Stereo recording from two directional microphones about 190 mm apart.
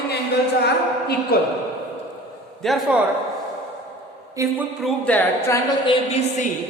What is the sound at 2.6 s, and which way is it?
Speech, centre (ahead or behind).